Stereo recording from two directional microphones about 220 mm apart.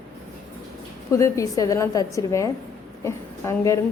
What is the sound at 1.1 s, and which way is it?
A woman's voice, 15° left (ahead or behind).